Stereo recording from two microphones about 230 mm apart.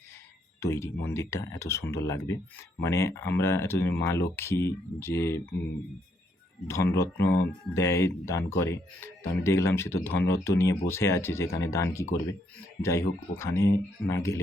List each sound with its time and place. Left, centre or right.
0.6 s speech: centre
6.7 s speech: centre